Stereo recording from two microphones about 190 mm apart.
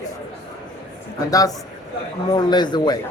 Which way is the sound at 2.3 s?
20° left (ahead or behind).